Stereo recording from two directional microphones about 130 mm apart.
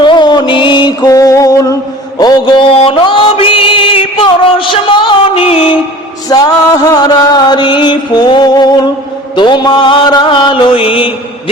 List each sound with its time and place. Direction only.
0.0 s music: 35° left (ahead or behind)
2.8 s mantra: 40° left (ahead or behind)
4.7 s music: 40° left (ahead or behind)
6.2 s music: 30° left (ahead or behind)